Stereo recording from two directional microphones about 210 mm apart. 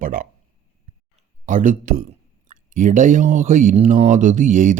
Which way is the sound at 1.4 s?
40° right (ahead or behind).